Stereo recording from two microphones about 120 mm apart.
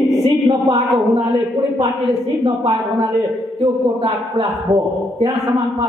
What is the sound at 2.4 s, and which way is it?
A man's voice, 40° right (ahead or behind).